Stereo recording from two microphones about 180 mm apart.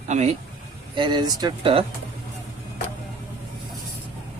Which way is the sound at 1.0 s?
25° right (ahead or behind).